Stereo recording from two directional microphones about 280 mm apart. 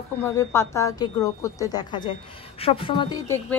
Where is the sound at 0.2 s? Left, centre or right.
Centre.